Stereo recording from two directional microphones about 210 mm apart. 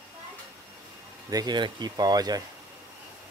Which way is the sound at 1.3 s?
20° right (ahead or behind).